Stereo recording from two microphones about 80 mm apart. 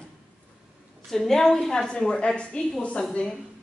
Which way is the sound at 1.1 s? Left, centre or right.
Centre.